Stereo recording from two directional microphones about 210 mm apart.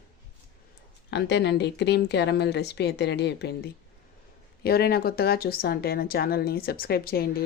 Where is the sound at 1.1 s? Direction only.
55° left (ahead or behind).